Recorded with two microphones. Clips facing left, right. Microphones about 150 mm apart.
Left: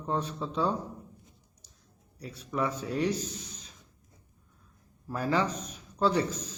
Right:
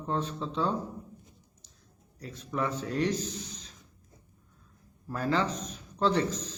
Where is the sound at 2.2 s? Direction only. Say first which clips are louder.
Left 1 dB; 10° left (ahead or behind).